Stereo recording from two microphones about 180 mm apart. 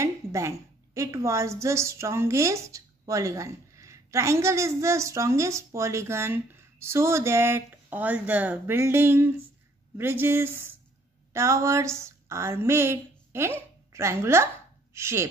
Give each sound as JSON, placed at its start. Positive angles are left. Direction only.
{"t": 0.0, "sound": "a woman's voice", "side_deg": -15}